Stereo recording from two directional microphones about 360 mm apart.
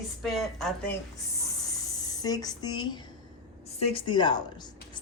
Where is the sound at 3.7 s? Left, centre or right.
Centre.